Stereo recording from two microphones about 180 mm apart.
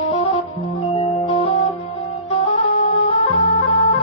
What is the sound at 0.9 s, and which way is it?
Music, 35° left (ahead or behind).